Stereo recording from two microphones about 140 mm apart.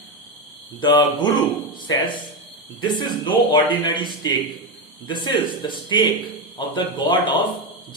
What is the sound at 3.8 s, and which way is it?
Speech, 30° left (ahead or behind).